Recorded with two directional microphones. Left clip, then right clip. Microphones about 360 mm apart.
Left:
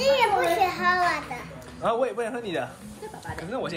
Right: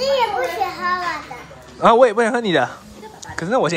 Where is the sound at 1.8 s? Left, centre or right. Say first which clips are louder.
Right 13 dB; centre.